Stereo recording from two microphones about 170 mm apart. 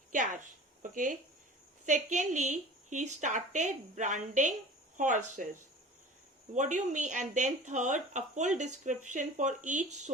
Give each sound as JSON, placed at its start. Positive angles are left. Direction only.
{"t": 0.8, "sound": "speech", "side_deg": -50}
{"t": 6.5, "sound": "speech", "side_deg": -45}